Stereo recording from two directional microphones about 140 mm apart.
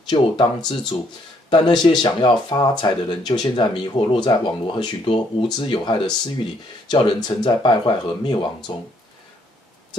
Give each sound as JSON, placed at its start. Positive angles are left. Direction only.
{"t": 0.0, "sound": "speech", "side_deg": 35}